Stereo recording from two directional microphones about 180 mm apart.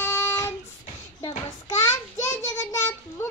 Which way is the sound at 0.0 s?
15° left (ahead or behind).